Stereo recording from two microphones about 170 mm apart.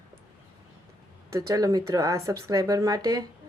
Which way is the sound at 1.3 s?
20° right (ahead or behind).